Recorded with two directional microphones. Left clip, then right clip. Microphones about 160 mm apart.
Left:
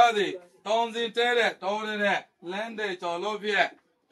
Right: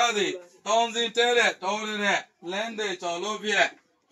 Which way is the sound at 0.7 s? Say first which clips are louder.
Right 2 dB; centre (ahead or behind).